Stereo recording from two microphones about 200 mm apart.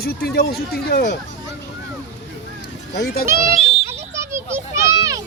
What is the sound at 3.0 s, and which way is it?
Speech, 50° left (ahead or behind).